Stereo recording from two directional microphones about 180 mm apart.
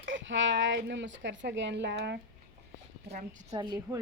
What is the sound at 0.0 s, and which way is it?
Speech, 90° right.